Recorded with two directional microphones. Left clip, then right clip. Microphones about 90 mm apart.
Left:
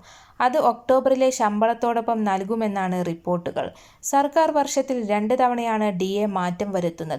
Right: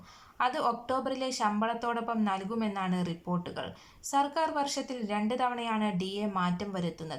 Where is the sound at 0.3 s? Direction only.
45° left (ahead or behind).